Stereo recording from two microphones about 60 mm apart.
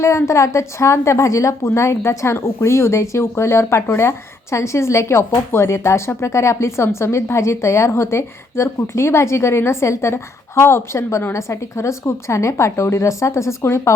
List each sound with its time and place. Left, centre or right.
0.0 s speech: left
11.3 s a woman's voice: left